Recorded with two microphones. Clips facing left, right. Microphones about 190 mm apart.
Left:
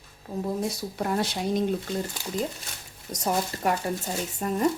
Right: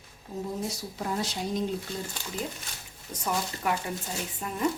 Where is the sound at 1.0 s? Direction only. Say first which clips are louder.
Left 5 dB; 60° left (ahead or behind).